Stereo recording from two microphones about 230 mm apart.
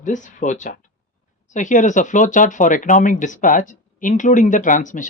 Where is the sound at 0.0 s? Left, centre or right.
Left.